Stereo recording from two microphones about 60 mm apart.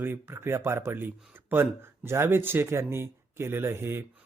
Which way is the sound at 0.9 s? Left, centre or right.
Right.